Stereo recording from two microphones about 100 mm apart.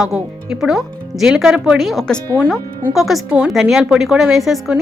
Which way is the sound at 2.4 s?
5° right (ahead or behind).